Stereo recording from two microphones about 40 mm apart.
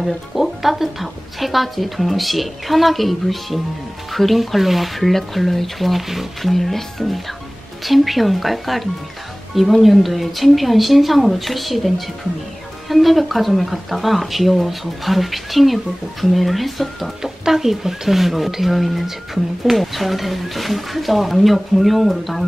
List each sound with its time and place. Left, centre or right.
0.0 s speech: centre
17.2 s speech: centre